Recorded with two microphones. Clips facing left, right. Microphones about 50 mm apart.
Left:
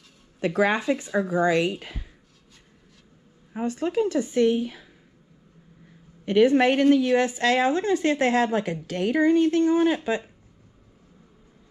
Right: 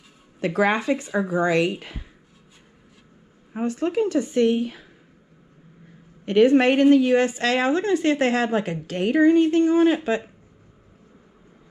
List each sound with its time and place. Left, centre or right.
0.4 s speech: right
1.1 s speech: right
1.4 s speech: right
3.5 s speech: right
6.2 s speech: right
6.7 s a woman's voice: right